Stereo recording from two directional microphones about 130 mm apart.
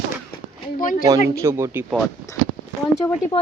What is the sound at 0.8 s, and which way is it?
Speech, 90° left.